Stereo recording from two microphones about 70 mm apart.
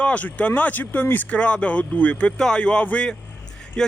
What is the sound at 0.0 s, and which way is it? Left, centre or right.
Speech, left.